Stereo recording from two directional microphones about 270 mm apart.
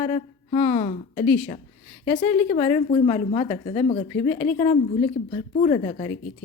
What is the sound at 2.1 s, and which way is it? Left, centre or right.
A woman's voice, left.